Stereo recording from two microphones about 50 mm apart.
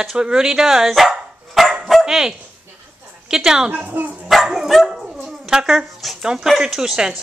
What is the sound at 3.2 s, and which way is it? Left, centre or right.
Speech, centre.